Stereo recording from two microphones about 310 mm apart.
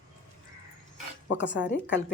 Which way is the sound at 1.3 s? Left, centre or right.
Left.